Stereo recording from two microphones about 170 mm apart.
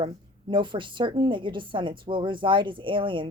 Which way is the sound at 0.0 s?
30° right (ahead or behind).